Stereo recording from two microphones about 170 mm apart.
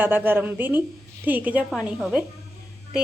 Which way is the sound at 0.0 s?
10° right (ahead or behind).